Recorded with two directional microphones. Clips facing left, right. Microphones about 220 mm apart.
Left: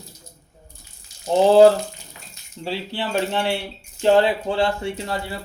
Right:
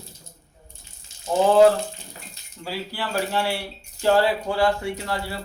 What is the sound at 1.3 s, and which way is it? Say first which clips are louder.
Speech: left 3 dB; 30° left (ahead or behind).